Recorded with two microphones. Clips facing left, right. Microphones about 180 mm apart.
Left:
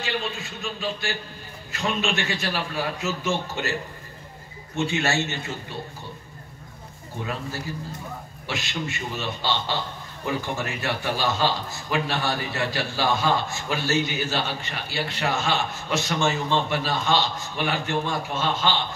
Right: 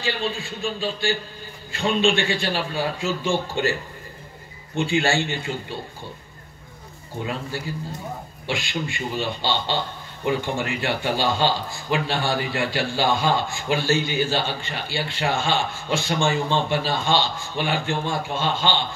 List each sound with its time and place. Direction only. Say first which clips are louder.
0.0 s a man's voice: right 3 dB; 30° right (ahead or behind)
4.8 s a man's voice: right 3 dB; 30° right (ahead or behind)
8.5 s a man's voice: right 2 dB; 20° left (ahead or behind)
9.1 s a man's voice: right 3 dB; 30° right (ahead or behind)